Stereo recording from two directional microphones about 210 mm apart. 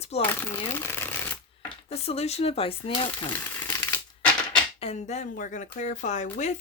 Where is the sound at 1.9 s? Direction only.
30° left (ahead or behind).